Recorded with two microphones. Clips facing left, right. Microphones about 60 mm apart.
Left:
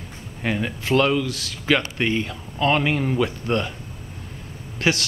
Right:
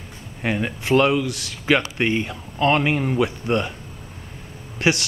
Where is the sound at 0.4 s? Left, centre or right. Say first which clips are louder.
Right 1 dB; centre.